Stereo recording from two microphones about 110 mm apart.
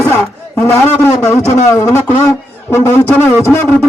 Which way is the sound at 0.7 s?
20° left (ahead or behind).